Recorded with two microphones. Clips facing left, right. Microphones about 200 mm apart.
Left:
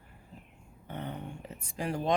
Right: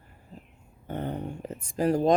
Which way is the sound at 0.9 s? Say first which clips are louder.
Right 7 dB; 45° right (ahead or behind).